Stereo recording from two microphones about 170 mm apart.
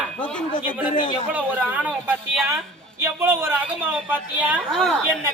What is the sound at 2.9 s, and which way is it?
A man's voice, 15° right (ahead or behind).